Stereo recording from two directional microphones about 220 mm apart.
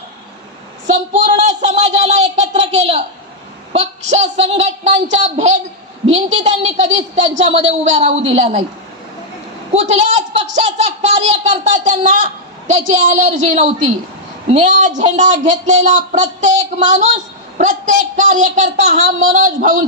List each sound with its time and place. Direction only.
0.9 s a sound: 30° right (ahead or behind)
3.7 s a woman's voice: 30° right (ahead or behind)
9.8 s a child's voice: 30° right (ahead or behind)
16.5 s speech: 20° right (ahead or behind)
16.8 s a child's voice: 35° right (ahead or behind)